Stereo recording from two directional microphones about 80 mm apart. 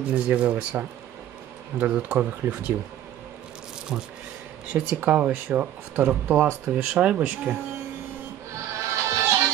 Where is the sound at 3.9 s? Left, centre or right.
Centre.